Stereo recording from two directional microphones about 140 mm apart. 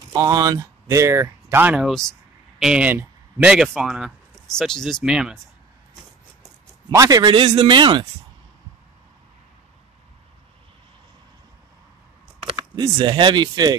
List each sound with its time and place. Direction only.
0.1 s speech: 30° right (ahead or behind); by 5.4 s 5° right (ahead or behind)
6.9 s a man's voice: 25° right (ahead or behind)
12.7 s a man's voice: 30° right (ahead or behind)